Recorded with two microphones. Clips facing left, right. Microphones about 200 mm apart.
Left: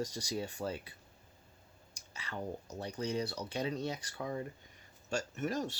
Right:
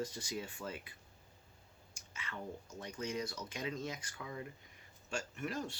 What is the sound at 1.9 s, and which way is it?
Speech, 35° left (ahead or behind).